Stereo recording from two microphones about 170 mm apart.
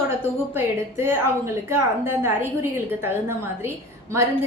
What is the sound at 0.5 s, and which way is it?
A woman's voice, 15° right (ahead or behind).